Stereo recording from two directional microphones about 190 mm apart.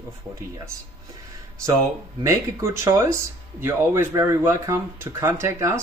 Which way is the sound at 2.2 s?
15° right (ahead or behind).